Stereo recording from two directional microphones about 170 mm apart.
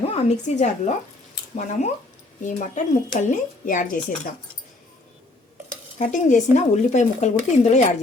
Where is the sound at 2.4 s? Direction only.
45° left (ahead or behind).